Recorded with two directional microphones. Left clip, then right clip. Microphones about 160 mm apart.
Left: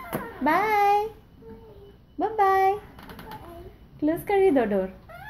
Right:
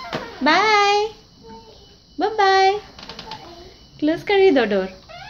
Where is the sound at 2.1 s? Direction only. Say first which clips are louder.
Right 5 dB; 15° right (ahead or behind).